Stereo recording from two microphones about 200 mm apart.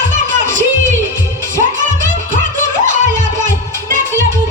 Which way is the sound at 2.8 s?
40° right (ahead or behind).